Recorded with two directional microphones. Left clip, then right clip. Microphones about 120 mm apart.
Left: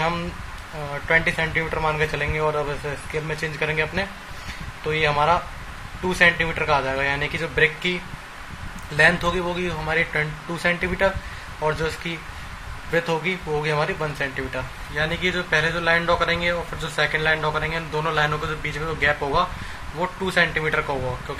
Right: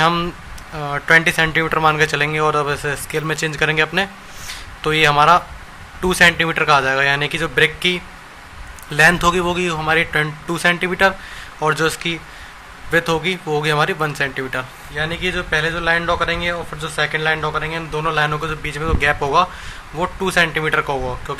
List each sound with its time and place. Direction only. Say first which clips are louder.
0.9 s speech: right 7 dB; 45° right (ahead or behind)
15.0 s speech: right 2 dB; 15° right (ahead or behind); by 20.8 s 35° right (ahead or behind)